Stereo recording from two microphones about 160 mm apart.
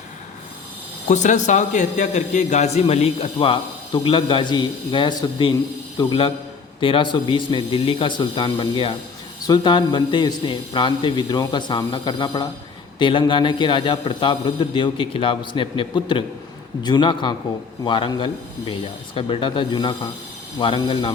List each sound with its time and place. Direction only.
1.0 s a man's voice: 50° left (ahead or behind); by 21.1 s 30° left (ahead or behind)